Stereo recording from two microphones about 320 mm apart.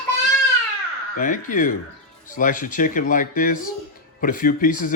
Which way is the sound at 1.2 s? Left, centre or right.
Left.